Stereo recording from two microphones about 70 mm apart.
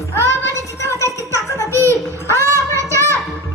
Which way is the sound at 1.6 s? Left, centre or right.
Right.